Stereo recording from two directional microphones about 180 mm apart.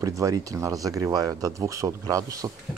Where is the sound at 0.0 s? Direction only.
20° right (ahead or behind).